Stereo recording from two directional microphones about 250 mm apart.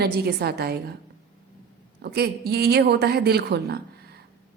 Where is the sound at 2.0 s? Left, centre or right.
Right.